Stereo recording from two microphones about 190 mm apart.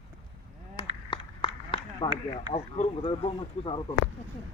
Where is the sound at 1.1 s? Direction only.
25° left (ahead or behind).